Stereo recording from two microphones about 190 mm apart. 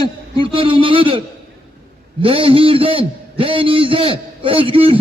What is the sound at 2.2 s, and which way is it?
A man's voice, 30° right (ahead or behind).